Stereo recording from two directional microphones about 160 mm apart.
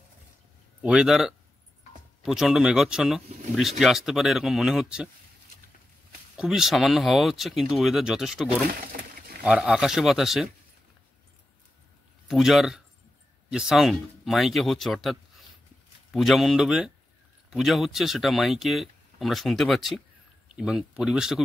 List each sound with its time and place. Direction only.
0.8 s speech: 5° right (ahead or behind)
6.3 s speech: 5° right (ahead or behind)
12.3 s speech: centre (ahead or behind)